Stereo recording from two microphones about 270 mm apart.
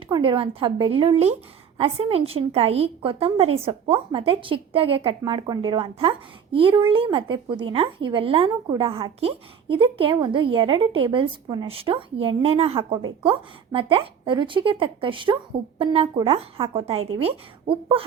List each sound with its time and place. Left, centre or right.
0.1 s a woman's voice: centre